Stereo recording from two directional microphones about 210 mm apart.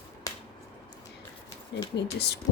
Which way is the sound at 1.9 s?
50° left (ahead or behind).